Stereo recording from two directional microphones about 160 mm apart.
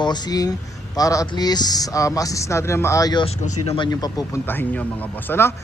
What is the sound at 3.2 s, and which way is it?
Speech, 40° left (ahead or behind).